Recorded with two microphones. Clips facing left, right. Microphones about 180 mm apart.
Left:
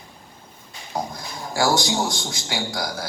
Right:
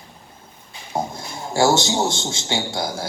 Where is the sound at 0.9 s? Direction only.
25° right (ahead or behind).